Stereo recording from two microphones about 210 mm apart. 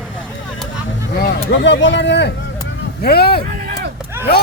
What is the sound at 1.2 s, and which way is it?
Speech, 55° left (ahead or behind).